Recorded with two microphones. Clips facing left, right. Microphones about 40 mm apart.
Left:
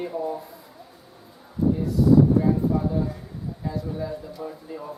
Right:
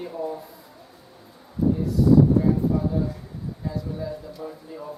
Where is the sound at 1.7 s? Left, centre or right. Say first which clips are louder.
Even; centre.